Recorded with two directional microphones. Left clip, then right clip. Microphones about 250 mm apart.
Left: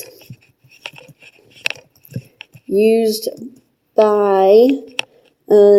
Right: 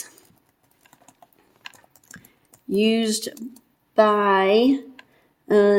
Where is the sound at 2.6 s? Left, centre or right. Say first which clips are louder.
Left 8 dB; right.